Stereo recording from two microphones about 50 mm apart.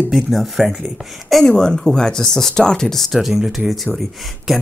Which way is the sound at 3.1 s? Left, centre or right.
Centre.